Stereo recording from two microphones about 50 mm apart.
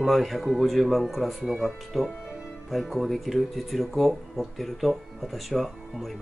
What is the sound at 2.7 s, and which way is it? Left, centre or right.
Speech, centre.